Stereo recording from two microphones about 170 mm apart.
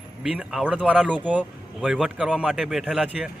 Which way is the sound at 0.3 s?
5° right (ahead or behind).